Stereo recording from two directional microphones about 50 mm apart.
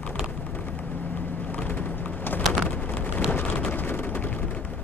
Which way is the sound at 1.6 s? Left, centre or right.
Left.